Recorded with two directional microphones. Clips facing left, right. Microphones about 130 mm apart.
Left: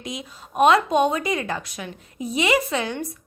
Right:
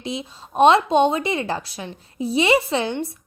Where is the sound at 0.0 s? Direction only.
30° right (ahead or behind).